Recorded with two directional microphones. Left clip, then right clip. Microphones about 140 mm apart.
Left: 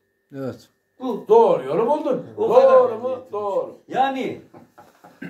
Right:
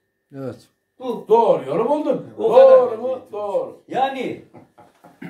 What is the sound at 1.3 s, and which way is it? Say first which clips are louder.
Speech: left 1 dB; 15° left (ahead or behind).